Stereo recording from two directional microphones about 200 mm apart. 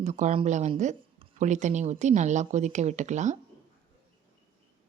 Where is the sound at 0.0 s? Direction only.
35° right (ahead or behind).